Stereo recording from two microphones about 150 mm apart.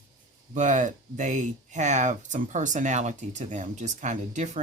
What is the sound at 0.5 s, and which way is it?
Speech, 55° right (ahead or behind).